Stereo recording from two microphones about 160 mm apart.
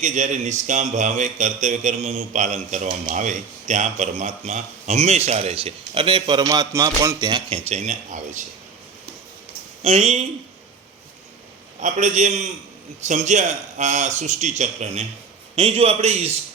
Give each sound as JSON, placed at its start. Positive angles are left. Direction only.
{"t": 0.0, "sound": "a man's voice", "side_deg": -50}
{"t": 7.7, "sound": "a man's voice", "side_deg": -50}
{"t": 9.8, "sound": "a man's voice", "side_deg": -40}
{"t": 11.8, "sound": "a man's voice", "side_deg": -50}